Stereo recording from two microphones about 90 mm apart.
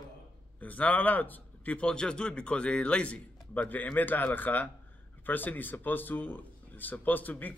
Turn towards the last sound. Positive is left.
turn(degrees=20)  # may be behind; listen again after turning